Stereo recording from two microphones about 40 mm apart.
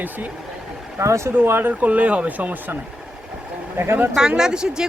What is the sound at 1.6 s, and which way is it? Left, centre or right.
Speech, right.